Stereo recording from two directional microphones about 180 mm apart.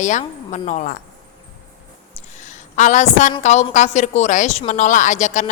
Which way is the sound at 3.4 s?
40° left (ahead or behind).